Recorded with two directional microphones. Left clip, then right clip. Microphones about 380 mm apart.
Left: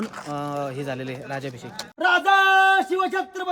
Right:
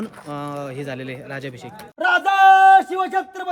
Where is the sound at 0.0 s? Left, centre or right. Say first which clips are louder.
Even; centre.